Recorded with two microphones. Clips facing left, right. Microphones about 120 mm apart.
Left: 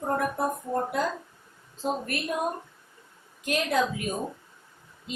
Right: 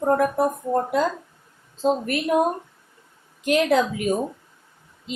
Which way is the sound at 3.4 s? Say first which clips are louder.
Right 7 dB; 80° right.